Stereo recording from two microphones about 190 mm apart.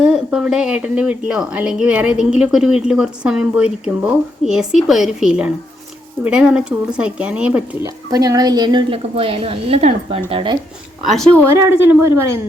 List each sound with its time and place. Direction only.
0.0 s speech: 5° right (ahead or behind)
7.9 s a woman's voice: 20° right (ahead or behind)
11.0 s speech: 5° left (ahead or behind)
11.5 s a woman's voice: 15° right (ahead or behind)